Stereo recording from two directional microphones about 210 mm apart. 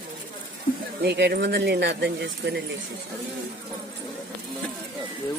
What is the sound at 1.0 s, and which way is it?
Speech, 55° right (ahead or behind).